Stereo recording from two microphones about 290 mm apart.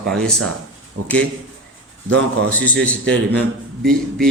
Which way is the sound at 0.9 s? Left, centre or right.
Right.